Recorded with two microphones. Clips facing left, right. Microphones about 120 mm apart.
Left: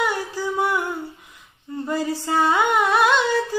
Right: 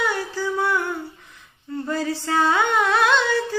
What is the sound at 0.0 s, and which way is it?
Music, 15° left (ahead or behind).